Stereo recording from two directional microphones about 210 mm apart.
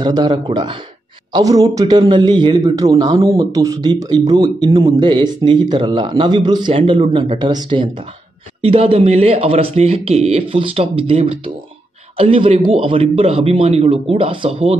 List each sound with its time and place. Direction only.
0.0 s a man's voice: 20° right (ahead or behind)